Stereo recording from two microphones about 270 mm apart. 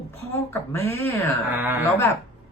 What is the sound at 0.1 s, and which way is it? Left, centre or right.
Speech, centre.